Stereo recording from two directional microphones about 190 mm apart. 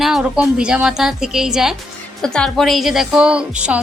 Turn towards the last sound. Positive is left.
turn(degrees=-5)  # may be behind; listen again after turning